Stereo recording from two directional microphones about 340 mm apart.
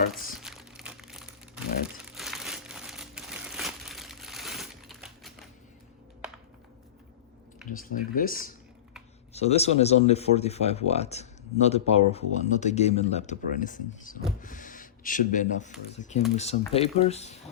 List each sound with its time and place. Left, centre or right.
0.3 s crumpling: centre
7.7 s speech: left
14.4 s a sound: left
15.9 s speech: centre